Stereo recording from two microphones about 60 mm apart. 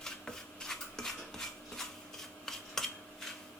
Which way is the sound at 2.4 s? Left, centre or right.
Centre.